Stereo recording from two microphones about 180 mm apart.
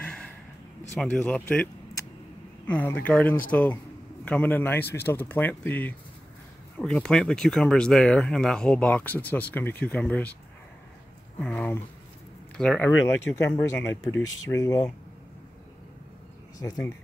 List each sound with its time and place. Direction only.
0.0 s a sound: 5° left (ahead or behind)
0.9 s speech: 10° left (ahead or behind)
11.3 s speech: 5° left (ahead or behind)
14.1 s speech: 15° left (ahead or behind)